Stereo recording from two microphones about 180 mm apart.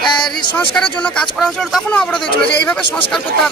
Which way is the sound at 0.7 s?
5° left (ahead or behind).